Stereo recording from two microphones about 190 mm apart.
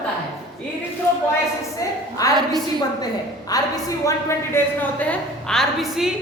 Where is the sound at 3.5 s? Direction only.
20° left (ahead or behind).